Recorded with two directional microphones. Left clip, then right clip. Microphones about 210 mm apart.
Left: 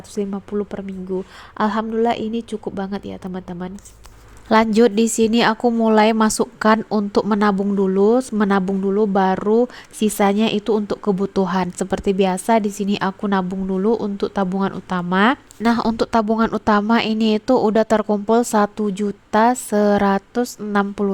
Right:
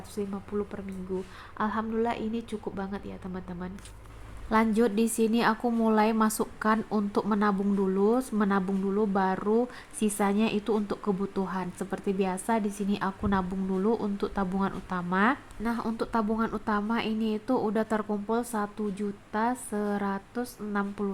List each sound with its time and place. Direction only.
0.1 s a woman's voice: 30° left (ahead or behind)